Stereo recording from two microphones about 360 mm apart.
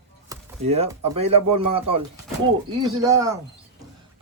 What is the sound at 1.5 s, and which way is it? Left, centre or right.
Speech, right.